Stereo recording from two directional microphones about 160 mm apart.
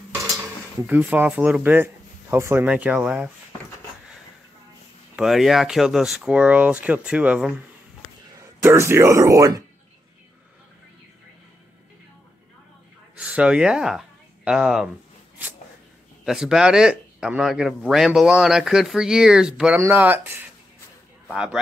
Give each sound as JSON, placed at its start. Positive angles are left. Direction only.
{"t": 0.8, "sound": "speech", "side_deg": -10}
{"t": 5.1, "sound": "speech", "side_deg": -5}
{"t": 8.6, "sound": "speech", "side_deg": -15}
{"t": 13.2, "sound": "speech", "side_deg": -5}
{"t": 16.3, "sound": "speech", "side_deg": -5}